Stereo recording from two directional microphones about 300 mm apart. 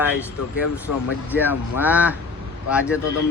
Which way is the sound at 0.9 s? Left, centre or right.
Left.